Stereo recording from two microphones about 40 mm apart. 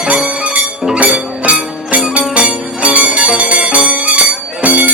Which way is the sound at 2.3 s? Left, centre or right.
Right.